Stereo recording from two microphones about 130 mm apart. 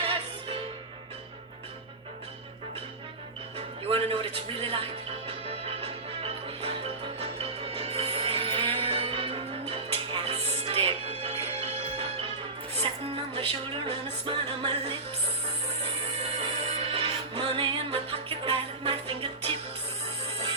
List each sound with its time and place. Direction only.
0.0 s music: 45° right (ahead or behind)
3.8 s a man's voice: 45° right (ahead or behind)
5.5 s music: 50° right (ahead or behind)
13.3 s a man's voice: 45° right (ahead or behind)
14.3 s music: 40° right (ahead or behind)
16.2 s music: 50° right (ahead or behind)